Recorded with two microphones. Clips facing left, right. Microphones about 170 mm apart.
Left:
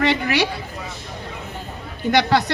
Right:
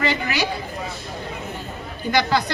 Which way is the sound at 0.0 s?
70° left (ahead or behind).